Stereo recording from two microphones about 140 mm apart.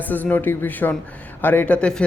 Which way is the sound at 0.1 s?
10° left (ahead or behind).